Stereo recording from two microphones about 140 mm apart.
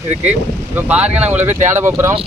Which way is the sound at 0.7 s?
10° right (ahead or behind).